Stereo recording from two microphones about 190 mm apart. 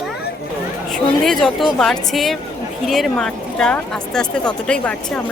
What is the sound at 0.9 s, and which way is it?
A woman's voice, centre (ahead or behind).